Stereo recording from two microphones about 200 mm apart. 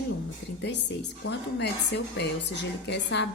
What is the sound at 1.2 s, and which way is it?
A woman's voice, 60° left (ahead or behind).